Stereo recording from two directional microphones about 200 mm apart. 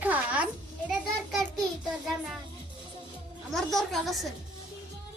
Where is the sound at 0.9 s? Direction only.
Centre (ahead or behind).